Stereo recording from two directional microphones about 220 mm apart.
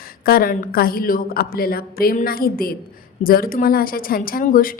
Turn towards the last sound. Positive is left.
turn(degrees=40)  # may be behind; listen again after turning